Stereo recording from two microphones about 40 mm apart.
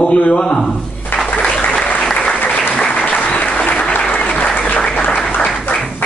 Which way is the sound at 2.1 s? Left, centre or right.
Left.